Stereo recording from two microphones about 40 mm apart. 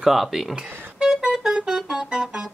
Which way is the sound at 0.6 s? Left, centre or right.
Right.